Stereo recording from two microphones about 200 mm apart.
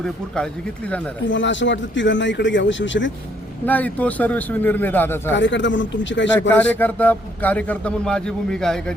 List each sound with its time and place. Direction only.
1.3 s a man's voice: 65° left (ahead or behind)
3.7 s a man's voice: 10° left (ahead or behind)
5.3 s a man's voice: 65° left (ahead or behind)
6.5 s a man's voice: 10° left (ahead or behind)